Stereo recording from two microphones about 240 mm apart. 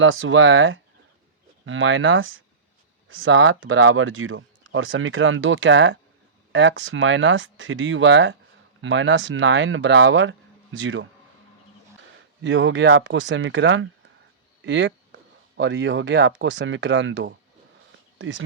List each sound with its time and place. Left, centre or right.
0.0 s speech: right
12.4 s speech: right